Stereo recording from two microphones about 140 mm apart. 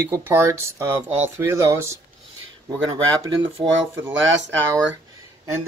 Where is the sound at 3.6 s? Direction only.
40° right (ahead or behind).